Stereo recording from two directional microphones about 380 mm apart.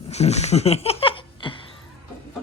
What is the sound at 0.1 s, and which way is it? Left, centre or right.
Laughter, centre.